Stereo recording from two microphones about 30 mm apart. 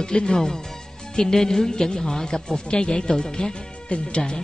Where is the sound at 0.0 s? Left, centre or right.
Left.